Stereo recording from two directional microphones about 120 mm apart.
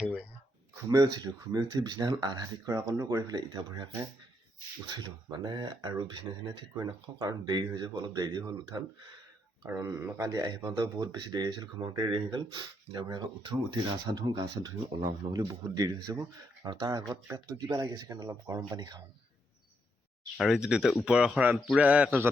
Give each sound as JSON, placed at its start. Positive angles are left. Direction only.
{"t": 0.0, "sound": "speech", "side_deg": -10}
{"t": 0.8, "sound": "speech", "side_deg": -25}
{"t": 4.9, "sound": "speech", "side_deg": -35}
{"t": 9.6, "sound": "speech", "side_deg": -25}
{"t": 20.3, "sound": "speech", "side_deg": 0}